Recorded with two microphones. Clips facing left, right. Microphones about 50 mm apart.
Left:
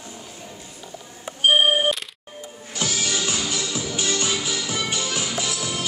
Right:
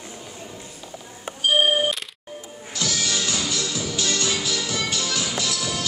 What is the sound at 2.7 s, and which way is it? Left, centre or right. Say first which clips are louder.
Music: even; left.